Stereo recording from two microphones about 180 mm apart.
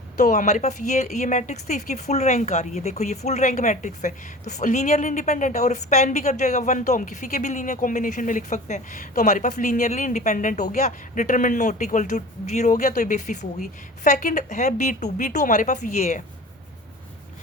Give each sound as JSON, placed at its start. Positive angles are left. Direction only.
{"t": 0.2, "sound": "a woman's voice", "side_deg": 45}